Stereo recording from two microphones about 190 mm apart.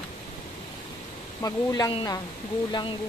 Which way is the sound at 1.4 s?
20° left (ahead or behind).